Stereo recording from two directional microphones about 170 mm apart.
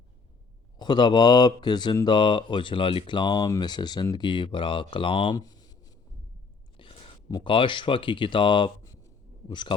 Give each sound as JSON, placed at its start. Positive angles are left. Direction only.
{"t": 0.8, "sound": "speech", "side_deg": 25}